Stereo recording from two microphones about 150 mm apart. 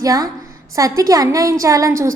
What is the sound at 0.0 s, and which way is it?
A woman's voice, 25° right (ahead or behind).